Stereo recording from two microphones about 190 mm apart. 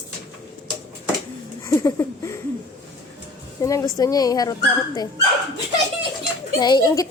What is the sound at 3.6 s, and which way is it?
Speech, 15° left (ahead or behind).